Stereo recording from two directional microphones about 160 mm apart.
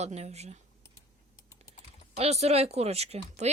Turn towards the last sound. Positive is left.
turn(degrees=-40)  # may be behind; listen again after turning